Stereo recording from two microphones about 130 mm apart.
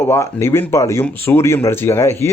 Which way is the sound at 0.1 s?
20° left (ahead or behind).